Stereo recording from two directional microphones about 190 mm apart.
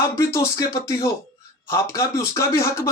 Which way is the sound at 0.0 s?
15° left (ahead or behind).